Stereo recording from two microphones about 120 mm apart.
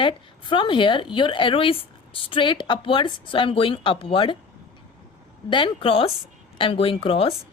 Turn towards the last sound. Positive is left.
turn(degrees=50)  # may be behind; listen again after turning